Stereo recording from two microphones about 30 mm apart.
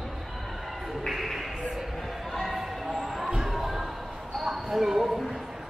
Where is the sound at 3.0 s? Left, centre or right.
Centre.